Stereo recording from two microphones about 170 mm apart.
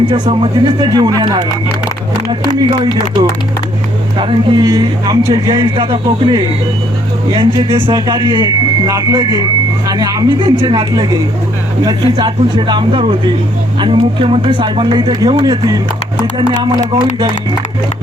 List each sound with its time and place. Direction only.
0.1 s a man's voice: 30° right (ahead or behind)
2.6 s a man's voice: 25° right (ahead or behind)